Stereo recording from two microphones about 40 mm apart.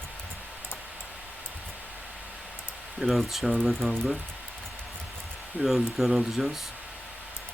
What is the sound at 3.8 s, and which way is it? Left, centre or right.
Speech, right.